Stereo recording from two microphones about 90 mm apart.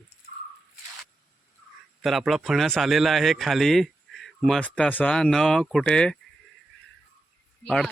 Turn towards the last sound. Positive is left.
turn(degrees=5)  # may be behind; listen again after turning